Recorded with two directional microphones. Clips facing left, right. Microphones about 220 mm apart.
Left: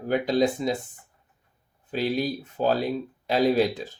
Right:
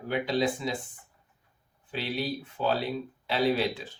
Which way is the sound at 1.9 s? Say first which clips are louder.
Left 6 dB; 40° left (ahead or behind).